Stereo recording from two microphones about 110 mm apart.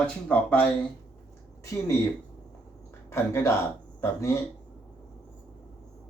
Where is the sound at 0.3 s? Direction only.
10° left (ahead or behind).